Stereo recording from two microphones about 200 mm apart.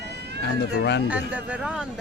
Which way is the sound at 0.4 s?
60° left (ahead or behind).